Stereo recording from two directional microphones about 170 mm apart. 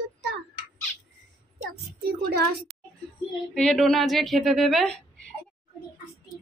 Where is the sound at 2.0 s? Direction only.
70° right (ahead or behind).